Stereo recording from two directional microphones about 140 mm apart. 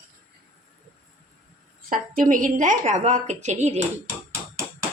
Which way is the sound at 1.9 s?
80° right.